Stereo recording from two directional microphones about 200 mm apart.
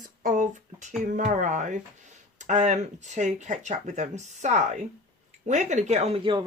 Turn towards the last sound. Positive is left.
turn(degrees=-25)  # may be behind; listen again after turning